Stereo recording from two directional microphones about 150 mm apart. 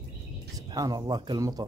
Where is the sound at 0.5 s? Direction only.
25° right (ahead or behind).